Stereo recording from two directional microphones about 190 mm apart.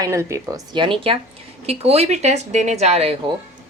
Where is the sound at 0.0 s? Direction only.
15° right (ahead or behind).